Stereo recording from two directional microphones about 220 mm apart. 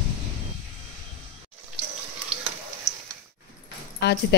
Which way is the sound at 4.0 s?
50° left (ahead or behind).